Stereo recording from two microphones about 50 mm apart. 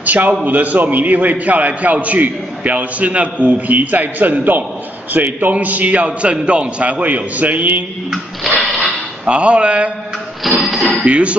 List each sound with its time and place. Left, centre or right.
0.0 s a man's voice: right
8.1 s a sound: centre
9.2 s a man's voice: right
10.4 s speech: centre
11.1 s a man's voice: right